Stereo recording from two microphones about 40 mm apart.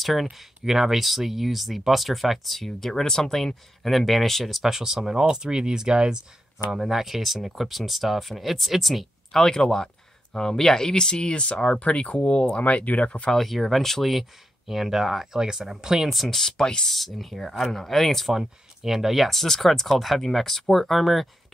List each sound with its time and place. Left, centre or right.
0.0 s speech: centre
9.3 s speech: centre; by 13.3 s left
13.3 s speech: centre
14.7 s speech: centre
16.1 s speech: centre
16.9 s speech: centre
18.4 s speech: centre